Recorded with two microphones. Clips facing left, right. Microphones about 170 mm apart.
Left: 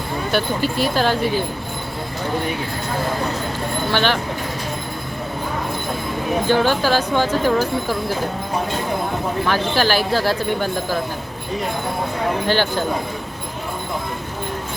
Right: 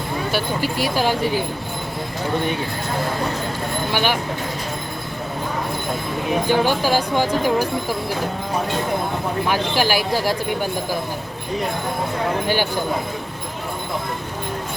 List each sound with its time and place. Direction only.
0.3 s speech: 10° right (ahead or behind)
3.9 s speech: 10° right (ahead or behind)
6.5 s speech: 15° right (ahead or behind)
9.5 s speech: 15° right (ahead or behind)
12.5 s speech: 15° right (ahead or behind)